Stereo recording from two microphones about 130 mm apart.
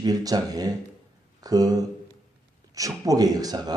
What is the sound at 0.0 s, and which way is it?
Speech, 30° right (ahead or behind).